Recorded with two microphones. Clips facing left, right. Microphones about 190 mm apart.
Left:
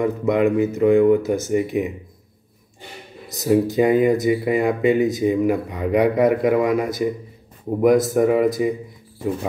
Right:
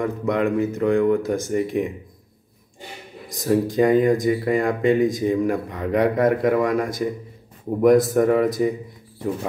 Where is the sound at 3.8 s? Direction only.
5° left (ahead or behind).